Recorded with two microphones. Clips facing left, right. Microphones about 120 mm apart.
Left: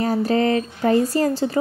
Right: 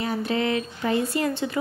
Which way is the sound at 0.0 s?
40° left (ahead or behind).